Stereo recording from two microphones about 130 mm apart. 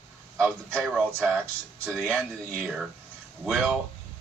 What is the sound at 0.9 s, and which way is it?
Speech, 15° right (ahead or behind).